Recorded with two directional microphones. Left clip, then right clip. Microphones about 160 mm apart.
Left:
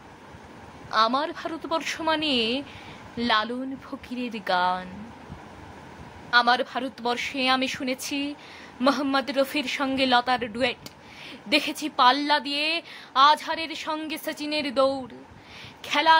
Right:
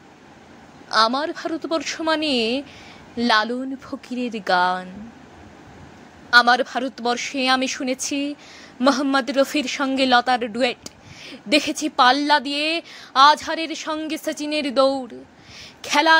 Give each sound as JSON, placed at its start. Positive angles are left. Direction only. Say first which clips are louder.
{"t": 0.8, "sound": "speech", "louder": "right 4 dB", "side_deg": -30}
{"t": 6.3, "sound": "a woman's voice", "louder": "right 6 dB", "side_deg": -30}